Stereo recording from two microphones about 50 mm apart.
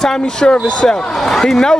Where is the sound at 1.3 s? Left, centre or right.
Centre.